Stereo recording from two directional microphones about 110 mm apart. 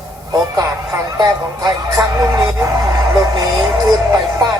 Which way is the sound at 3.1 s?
35° right (ahead or behind).